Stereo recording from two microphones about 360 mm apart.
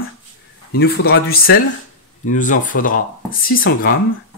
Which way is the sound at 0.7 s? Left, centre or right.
Left.